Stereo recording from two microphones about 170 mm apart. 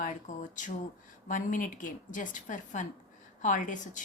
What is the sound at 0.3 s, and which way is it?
A woman's voice, 45° left (ahead or behind).